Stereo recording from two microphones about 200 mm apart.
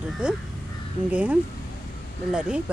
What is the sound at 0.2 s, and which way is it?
Speech, 5° right (ahead or behind).